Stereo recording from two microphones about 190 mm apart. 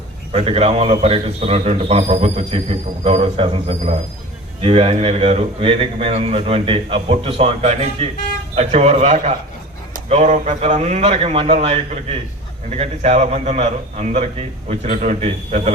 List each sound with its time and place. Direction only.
0.3 s a man's voice: 30° right (ahead or behind)